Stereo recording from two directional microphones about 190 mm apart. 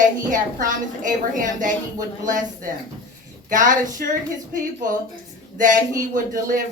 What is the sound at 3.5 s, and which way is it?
A woman's voice, 45° right (ahead or behind).